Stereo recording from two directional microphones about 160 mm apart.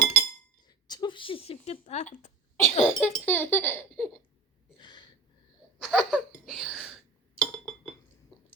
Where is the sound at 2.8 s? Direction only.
10° left (ahead or behind).